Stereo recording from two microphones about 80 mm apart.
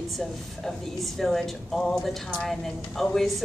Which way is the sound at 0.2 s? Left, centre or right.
Centre.